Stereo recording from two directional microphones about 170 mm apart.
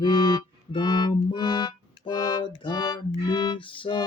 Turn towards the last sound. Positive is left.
turn(degrees=30)  # may be behind; listen again after turning